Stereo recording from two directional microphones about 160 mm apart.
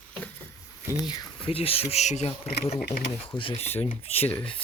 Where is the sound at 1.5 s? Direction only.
35° left (ahead or behind).